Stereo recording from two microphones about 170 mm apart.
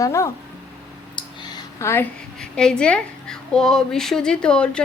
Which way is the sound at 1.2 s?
20° left (ahead or behind).